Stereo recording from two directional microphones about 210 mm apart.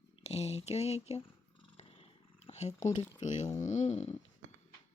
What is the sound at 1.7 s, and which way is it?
Purr, 25° left (ahead or behind).